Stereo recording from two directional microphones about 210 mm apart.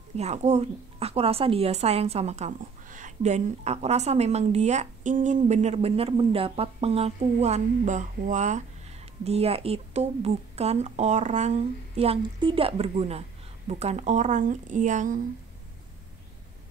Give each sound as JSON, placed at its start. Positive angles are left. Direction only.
{"t": 0.2, "sound": "a woman's voice", "side_deg": -30}